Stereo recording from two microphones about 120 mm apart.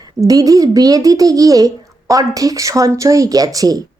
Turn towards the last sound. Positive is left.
turn(degrees=-30)  # may be behind; listen again after turning